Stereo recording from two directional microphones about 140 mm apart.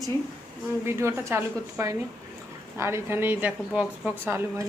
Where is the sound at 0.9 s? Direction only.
20° right (ahead or behind).